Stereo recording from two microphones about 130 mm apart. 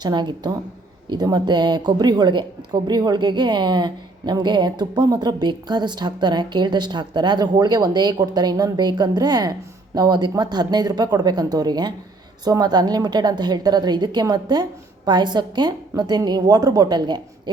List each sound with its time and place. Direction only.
0.0 s a woman's voice: 35° right (ahead or behind)